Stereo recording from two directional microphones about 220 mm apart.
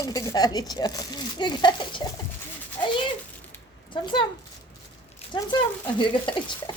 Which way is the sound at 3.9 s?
20° left (ahead or behind).